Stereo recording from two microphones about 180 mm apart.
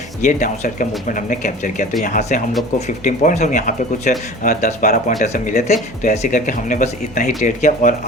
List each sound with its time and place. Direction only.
0.2 s speech: 45° left (ahead or behind)